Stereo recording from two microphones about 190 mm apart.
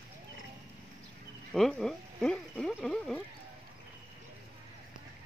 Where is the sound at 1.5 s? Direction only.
Centre (ahead or behind).